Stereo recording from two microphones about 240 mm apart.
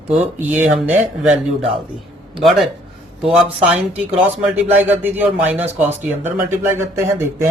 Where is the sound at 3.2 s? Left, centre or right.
Centre.